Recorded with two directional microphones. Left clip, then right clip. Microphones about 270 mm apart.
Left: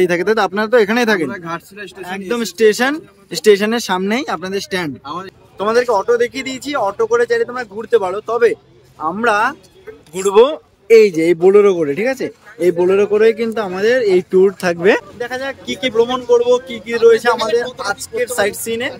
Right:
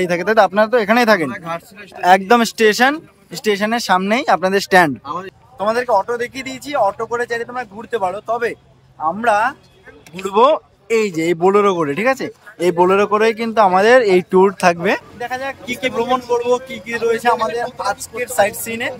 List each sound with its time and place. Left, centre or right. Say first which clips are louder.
0.0 s speech: right 1 dB; centre